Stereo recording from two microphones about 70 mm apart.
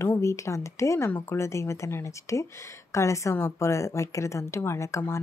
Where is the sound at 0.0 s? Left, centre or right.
Left.